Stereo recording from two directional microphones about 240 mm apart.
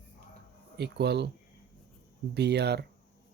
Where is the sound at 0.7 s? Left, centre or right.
Right.